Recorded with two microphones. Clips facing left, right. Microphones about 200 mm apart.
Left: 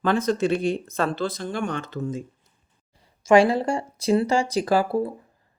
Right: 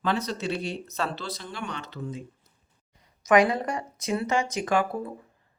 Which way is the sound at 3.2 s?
30° left (ahead or behind).